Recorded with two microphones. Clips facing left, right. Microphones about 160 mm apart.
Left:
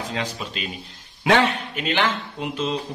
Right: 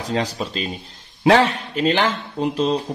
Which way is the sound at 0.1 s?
35° right (ahead or behind).